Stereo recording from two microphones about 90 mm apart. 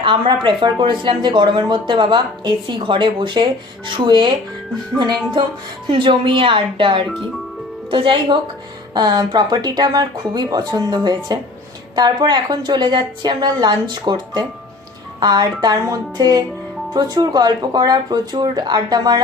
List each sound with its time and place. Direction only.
0.0 s a woman's voice: 65° right (ahead or behind)
5.9 s speech: 70° right (ahead or behind)
9.0 s a woman's voice: 50° right (ahead or behind)